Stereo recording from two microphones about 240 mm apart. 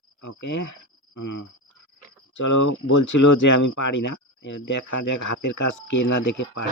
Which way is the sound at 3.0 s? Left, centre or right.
Left.